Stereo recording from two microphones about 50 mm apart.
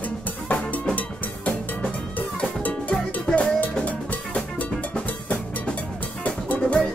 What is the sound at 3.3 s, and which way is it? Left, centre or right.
Drum, left.